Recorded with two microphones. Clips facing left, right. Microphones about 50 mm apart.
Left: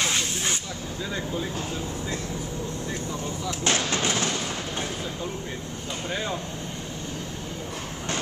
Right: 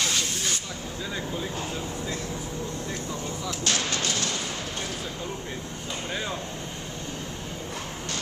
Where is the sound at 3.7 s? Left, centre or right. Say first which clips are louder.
Left 3 dB; left.